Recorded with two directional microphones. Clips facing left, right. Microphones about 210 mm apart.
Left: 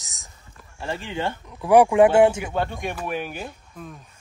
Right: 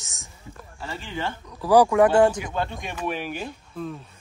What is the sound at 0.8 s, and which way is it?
Speech, 20° left (ahead or behind).